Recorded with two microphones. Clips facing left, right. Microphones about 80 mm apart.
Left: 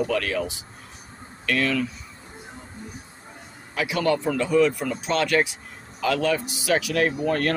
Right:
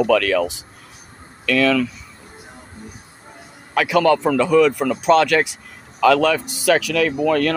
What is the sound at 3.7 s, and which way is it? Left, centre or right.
Speech, right.